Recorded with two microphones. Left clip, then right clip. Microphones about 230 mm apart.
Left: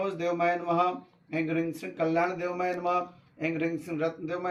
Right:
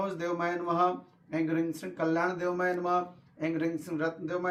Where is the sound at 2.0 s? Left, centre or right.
Centre.